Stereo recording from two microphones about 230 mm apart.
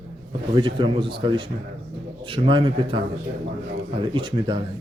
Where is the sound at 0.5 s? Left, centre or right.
Right.